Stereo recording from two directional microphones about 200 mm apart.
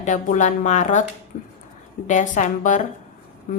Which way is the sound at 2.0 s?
40° left (ahead or behind).